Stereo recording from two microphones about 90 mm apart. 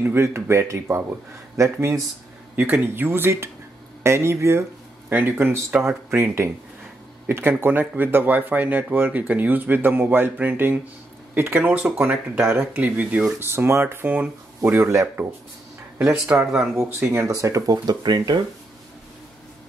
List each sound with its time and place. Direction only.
0.0 s speech: 25° right (ahead or behind)
14.7 s speech: 30° right (ahead or behind)
16.3 s speech: 25° right (ahead or behind); by 18.4 s 55° right (ahead or behind)